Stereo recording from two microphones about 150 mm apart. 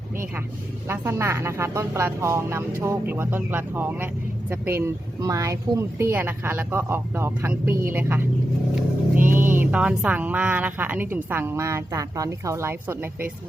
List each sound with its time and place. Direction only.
0.9 s speech: 15° right (ahead or behind)